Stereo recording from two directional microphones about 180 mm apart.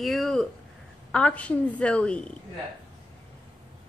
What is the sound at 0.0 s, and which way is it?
A woman's voice, centre (ahead or behind).